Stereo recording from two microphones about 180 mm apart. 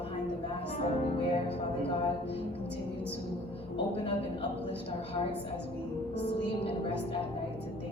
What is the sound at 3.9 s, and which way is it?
A woman's voice, 30° left (ahead or behind).